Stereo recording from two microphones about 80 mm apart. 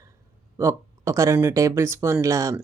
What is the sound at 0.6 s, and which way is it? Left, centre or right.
Speech, right.